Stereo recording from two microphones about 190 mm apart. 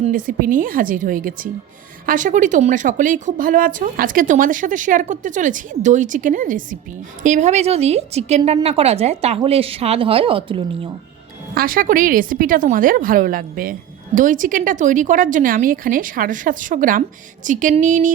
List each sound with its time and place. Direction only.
0.0 s a woman's voice: 45° right (ahead or behind); by 10.6 s 30° right (ahead or behind)
11.5 s a woman's voice: 50° right (ahead or behind)